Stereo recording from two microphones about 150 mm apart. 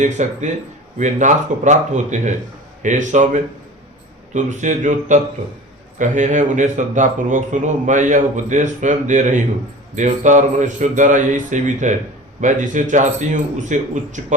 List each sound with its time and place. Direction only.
0.0 s a man's voice: 50° right (ahead or behind)